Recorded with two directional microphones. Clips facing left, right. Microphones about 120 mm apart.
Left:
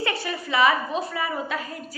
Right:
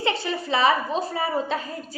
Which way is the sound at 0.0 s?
25° right (ahead or behind).